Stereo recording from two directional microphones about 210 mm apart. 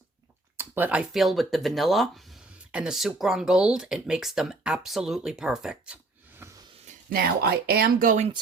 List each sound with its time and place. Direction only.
0.5 s speech: 10° right (ahead or behind)
6.4 s a sound: 10° right (ahead or behind)
6.8 s speech: 45° right (ahead or behind)